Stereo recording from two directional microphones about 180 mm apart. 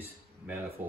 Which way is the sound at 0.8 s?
10° right (ahead or behind).